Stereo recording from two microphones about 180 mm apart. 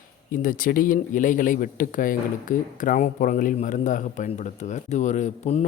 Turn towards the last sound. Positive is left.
turn(degrees=40)  # may be behind; listen again after turning